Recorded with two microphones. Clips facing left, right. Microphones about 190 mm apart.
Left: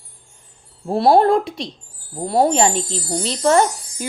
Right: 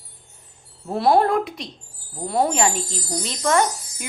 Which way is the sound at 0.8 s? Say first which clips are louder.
Left 4 dB; 30° left (ahead or behind).